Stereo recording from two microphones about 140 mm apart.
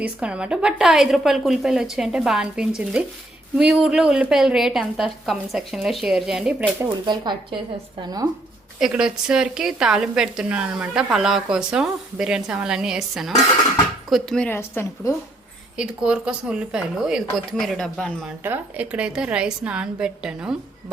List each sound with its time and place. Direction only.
0.0 s a woman's voice: 5° right (ahead or behind)
7.0 s speech: 30° right (ahead or behind)
8.8 s a woman's voice: 5° right (ahead or behind)
14.5 s a woman's voice: 15° left (ahead or behind)
15.8 s a woman's voice: 5° right (ahead or behind)
18.4 s a woman's voice: 10° right (ahead or behind)